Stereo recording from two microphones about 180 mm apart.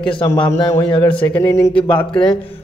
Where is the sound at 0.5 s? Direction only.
15° left (ahead or behind).